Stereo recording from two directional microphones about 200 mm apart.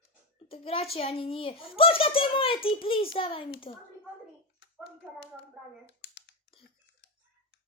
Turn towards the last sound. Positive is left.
turn(degrees=60)  # may be behind; listen again after turning